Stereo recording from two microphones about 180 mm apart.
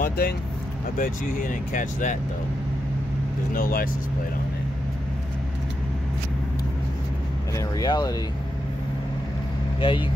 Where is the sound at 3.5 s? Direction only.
50° left (ahead or behind).